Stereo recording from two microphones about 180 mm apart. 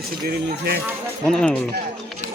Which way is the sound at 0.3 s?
55° right (ahead or behind).